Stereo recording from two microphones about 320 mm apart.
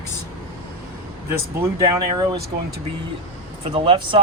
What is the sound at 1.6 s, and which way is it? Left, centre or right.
Speech, centre.